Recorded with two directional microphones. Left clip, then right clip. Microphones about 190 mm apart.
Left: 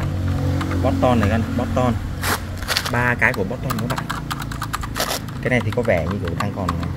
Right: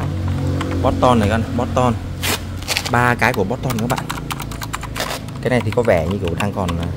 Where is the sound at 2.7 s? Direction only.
20° left (ahead or behind).